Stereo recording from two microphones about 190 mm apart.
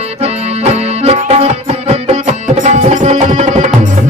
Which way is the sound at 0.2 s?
35° right (ahead or behind).